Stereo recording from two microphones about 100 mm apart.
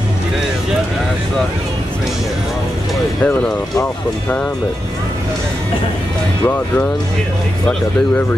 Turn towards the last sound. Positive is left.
turn(degrees=20)  # may be behind; listen again after turning